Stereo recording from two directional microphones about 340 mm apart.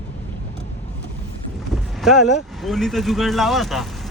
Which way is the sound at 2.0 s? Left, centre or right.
Centre.